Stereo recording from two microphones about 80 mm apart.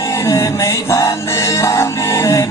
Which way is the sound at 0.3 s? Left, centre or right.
Left.